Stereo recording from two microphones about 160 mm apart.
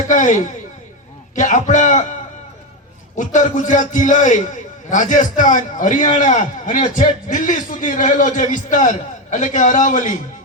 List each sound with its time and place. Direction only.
0.1 s a man's voice: 50° left (ahead or behind)
3.2 s a man's voice: 50° left (ahead or behind)